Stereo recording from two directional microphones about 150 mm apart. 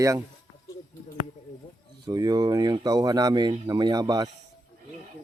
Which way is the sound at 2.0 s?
25° right (ahead or behind).